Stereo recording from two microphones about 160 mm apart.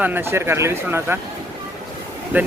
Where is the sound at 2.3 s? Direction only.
10° right (ahead or behind).